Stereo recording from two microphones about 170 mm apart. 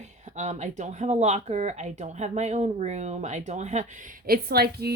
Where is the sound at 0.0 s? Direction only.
45° right (ahead or behind).